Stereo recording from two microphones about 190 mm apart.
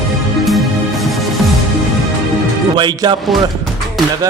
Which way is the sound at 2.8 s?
25° right (ahead or behind).